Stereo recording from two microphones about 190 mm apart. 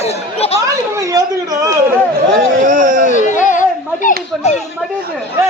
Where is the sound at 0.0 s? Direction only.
30° left (ahead or behind).